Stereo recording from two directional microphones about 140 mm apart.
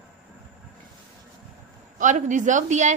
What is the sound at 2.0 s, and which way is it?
Speech, 60° right (ahead or behind).